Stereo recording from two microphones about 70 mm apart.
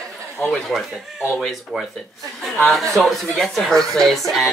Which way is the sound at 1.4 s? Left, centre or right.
Centre.